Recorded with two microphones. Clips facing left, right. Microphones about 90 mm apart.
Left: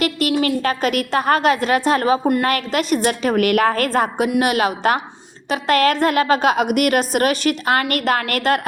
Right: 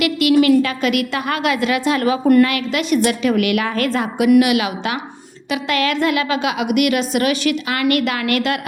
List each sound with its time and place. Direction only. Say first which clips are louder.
0.0 s a woman's voice: right 4 dB; 40° left (ahead or behind)